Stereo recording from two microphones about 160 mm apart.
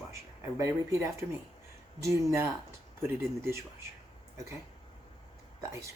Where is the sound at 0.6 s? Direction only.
20° right (ahead or behind).